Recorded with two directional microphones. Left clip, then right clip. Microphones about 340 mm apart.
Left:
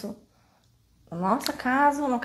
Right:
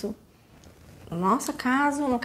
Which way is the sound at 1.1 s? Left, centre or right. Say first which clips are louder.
Right 1 dB; right.